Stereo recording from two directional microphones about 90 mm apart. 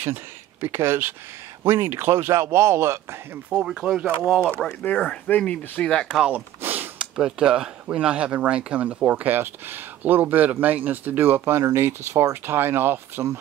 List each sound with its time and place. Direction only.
0.0 s speech: 25° right (ahead or behind)
3.6 s speech: 5° right (ahead or behind)
4.8 s speech: 10° left (ahead or behind)
6.3 s a sound: 20° right (ahead or behind)
7.2 s speech: 10° right (ahead or behind)